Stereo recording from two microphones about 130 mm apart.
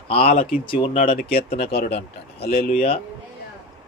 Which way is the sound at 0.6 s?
40° left (ahead or behind).